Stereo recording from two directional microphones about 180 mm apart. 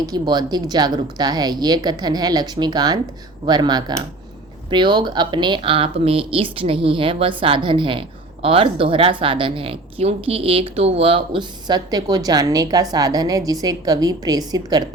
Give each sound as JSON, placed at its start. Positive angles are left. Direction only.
{"t": 0.0, "sound": "speech", "side_deg": -20}